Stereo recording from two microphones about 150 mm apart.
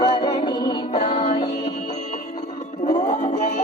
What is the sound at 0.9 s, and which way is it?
Music, 35° left (ahead or behind).